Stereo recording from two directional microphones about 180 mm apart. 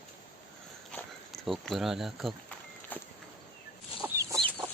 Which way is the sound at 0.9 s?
Centre (ahead or behind).